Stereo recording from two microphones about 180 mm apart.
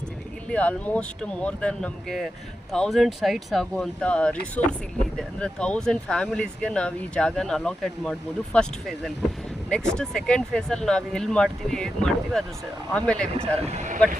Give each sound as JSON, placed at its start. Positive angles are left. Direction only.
{"t": 0.5, "sound": "speech", "side_deg": 10}
{"t": 13.7, "sound": "speech", "side_deg": -40}